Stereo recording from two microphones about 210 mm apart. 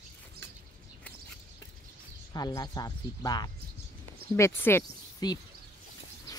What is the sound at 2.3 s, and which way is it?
Speech, 20° left (ahead or behind).